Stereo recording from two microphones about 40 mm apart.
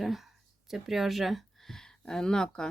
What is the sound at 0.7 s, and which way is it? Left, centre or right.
Speech, centre.